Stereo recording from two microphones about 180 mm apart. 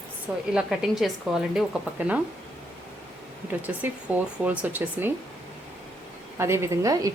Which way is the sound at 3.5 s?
10° right (ahead or behind).